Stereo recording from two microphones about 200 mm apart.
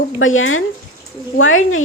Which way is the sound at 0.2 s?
85° left.